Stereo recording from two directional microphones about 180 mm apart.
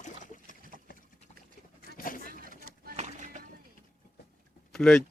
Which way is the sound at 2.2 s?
55° right (ahead or behind).